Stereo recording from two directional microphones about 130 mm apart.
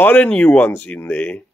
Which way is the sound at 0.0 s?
10° left (ahead or behind).